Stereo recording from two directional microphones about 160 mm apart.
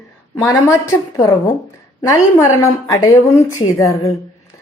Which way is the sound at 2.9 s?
20° left (ahead or behind).